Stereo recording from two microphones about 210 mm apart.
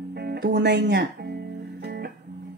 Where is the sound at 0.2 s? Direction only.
50° right (ahead or behind).